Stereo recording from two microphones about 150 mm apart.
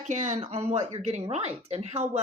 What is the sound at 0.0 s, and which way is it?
Speech, 55° right (ahead or behind).